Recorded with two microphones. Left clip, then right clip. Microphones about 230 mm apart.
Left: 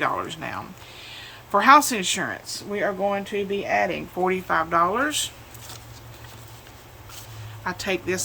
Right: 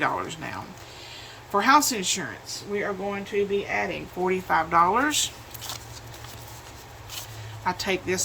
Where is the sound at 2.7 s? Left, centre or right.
Left.